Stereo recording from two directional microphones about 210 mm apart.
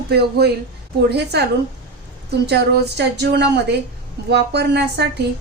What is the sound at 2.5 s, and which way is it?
A woman's voice, 50° right (ahead or behind).